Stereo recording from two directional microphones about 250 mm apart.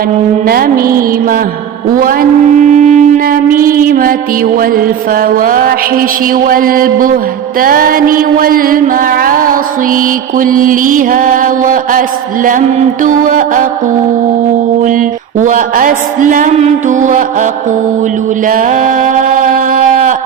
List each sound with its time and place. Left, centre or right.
0.4 s mantra: right
2.6 s wind instrument: right
7.6 s mantra: right
14.8 s mantra: right
18.4 s a sound: right